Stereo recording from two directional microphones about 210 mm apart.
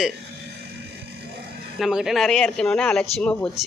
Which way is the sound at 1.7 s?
5° right (ahead or behind).